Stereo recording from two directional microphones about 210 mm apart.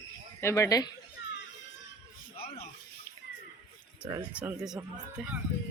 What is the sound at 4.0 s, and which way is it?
Speech, 15° right (ahead or behind).